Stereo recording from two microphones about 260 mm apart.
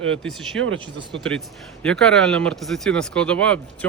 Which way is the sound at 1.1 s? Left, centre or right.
Right.